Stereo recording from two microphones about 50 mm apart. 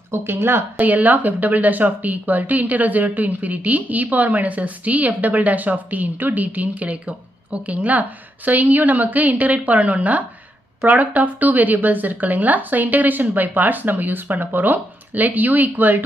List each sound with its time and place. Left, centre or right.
0.1 s speech: right
0.7 s speech: right